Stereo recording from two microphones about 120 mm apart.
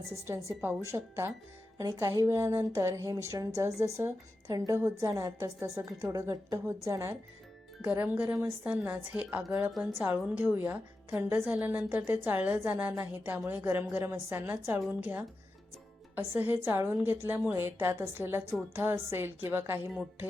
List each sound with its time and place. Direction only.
0.1 s a woman's voice: 20° right (ahead or behind)
7.9 s a woman's voice: 15° right (ahead or behind)
13.3 s a woman's voice: 10° right (ahead or behind)